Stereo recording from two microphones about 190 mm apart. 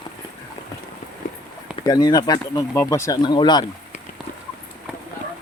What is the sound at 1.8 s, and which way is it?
Speech, 20° left (ahead or behind).